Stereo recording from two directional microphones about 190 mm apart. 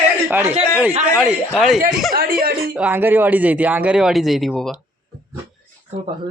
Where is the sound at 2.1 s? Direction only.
55° right (ahead or behind).